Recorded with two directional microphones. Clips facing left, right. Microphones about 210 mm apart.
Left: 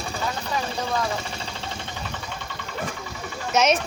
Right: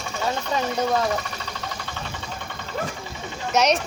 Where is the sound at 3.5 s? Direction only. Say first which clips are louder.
Even; centre (ahead or behind).